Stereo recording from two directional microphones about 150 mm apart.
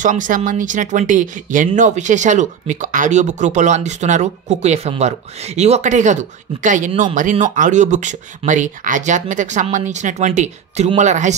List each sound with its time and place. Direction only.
0.0 s speech: 60° right (ahead or behind)